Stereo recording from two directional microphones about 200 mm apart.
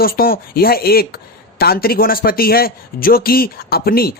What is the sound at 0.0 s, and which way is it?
Speech, 50° left (ahead or behind).